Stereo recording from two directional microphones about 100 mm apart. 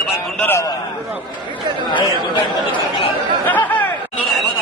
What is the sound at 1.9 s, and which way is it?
Speech, 50° left (ahead or behind).